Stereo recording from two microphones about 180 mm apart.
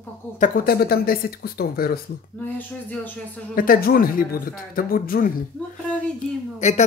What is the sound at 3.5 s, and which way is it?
Speech, 55° left (ahead or behind).